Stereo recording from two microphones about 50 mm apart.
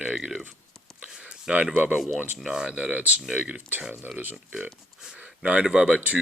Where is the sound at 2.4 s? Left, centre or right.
Centre.